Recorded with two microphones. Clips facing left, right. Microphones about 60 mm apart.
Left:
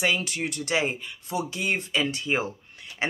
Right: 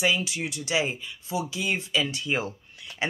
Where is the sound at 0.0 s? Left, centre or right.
Left.